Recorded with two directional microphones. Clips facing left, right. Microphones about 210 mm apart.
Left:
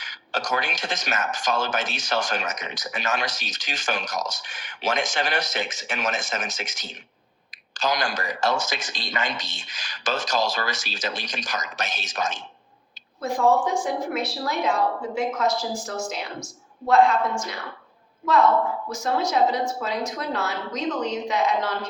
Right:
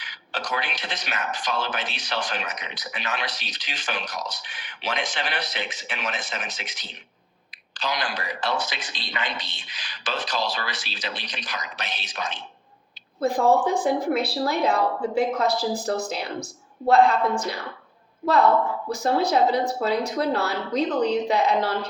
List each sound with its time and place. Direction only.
0.0 s speech: 45° left (ahead or behind)
13.1 s a woman's voice: 35° right (ahead or behind)
18.9 s a woman's voice: 35° right (ahead or behind)